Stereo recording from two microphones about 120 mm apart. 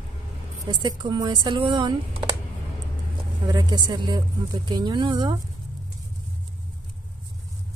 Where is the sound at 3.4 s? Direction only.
35° right (ahead or behind).